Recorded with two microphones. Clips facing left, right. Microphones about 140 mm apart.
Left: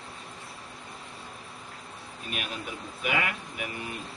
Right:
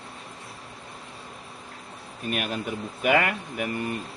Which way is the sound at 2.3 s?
50° right (ahead or behind).